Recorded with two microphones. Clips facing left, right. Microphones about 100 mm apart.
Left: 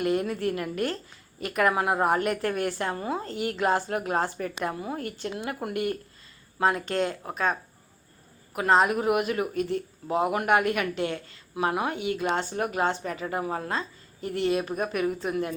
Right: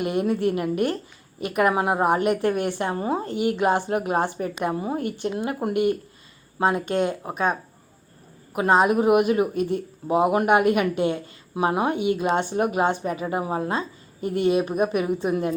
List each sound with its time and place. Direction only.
0.0 s speech: 20° right (ahead or behind)
8.5 s speech: 20° right (ahead or behind)